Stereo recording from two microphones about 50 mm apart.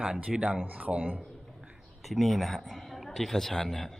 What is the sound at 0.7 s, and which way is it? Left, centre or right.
Speech, right.